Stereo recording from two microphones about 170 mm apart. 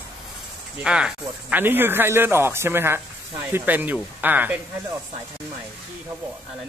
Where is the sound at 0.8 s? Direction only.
5° right (ahead or behind).